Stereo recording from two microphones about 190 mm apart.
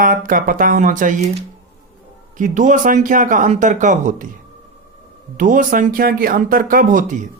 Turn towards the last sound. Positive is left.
turn(degrees=-40)  # may be behind; listen again after turning